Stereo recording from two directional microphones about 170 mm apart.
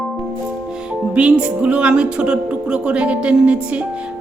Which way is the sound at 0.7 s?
5° right (ahead or behind).